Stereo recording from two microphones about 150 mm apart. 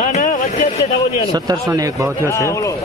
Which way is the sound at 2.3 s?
20° left (ahead or behind).